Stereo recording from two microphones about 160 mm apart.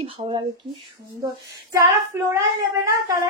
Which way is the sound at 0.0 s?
30° right (ahead or behind).